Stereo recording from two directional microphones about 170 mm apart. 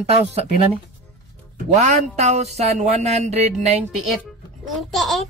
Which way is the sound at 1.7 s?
40° right (ahead or behind).